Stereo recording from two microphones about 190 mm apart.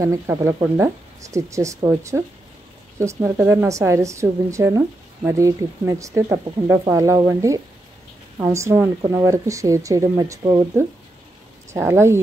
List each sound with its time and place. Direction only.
0.0 s a woman's voice: 15° right (ahead or behind)